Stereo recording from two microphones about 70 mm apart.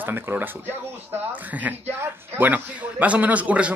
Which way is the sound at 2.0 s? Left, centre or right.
Right.